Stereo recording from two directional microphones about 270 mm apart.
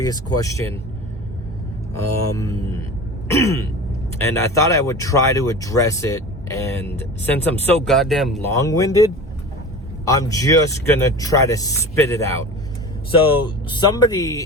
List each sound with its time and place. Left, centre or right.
0.0 s speech: centre
2.0 s speech: centre
3.3 s throat clearing: centre
4.2 s speech: centre
8.5 s speech: centre
10.1 s speech: centre